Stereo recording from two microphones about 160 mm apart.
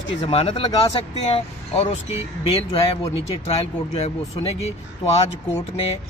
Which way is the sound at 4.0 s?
40° left (ahead or behind).